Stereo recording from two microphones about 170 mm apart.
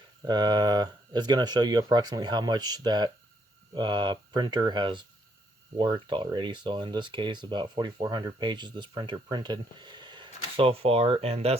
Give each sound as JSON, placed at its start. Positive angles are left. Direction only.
{"t": 0.3, "sound": "speech", "side_deg": -25}